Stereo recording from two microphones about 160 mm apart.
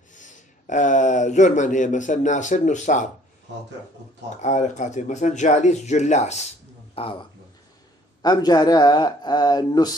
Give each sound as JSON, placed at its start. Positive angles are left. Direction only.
{"t": 0.1, "sound": "speech", "side_deg": 50}
{"t": 4.4, "sound": "speech", "side_deg": 50}
{"t": 7.0, "sound": "speech", "side_deg": 35}